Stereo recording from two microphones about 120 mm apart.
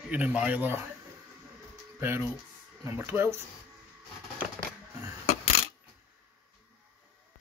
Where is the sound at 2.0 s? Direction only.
15° right (ahead or behind).